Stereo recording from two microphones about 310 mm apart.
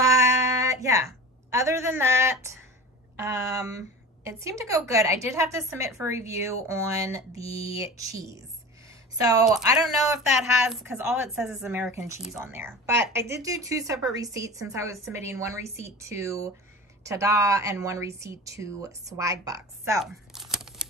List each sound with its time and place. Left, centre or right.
0.0 s a sound: centre
3.2 s a woman's voice: centre
7.4 s speech: centre
7.8 s a woman's voice: centre
8.8 s a sound: centre
10.4 s a woman's voice: centre